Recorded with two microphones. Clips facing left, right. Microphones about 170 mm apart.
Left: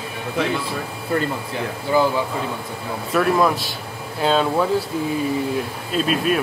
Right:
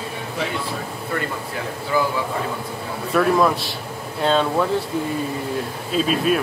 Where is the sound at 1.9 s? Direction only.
20° left (ahead or behind).